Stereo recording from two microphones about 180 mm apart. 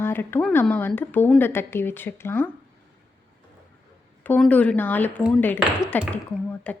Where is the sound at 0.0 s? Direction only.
10° left (ahead or behind).